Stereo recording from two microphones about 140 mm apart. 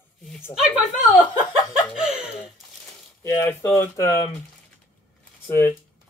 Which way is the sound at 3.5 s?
15° left (ahead or behind).